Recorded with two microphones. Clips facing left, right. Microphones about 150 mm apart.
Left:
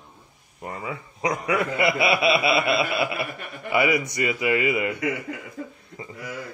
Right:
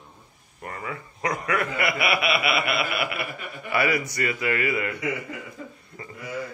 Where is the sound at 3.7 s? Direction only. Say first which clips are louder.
Left 3 dB; 20° left (ahead or behind).